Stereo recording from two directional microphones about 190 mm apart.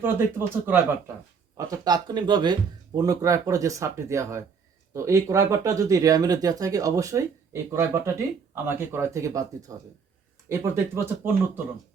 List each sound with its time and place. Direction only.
0.0 s speech: 10° right (ahead or behind)